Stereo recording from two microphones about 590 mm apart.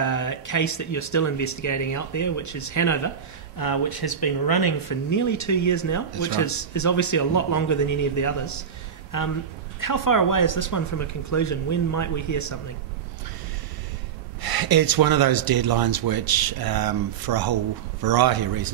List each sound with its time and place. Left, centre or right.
0.0 s speech: left
14.4 s speech: right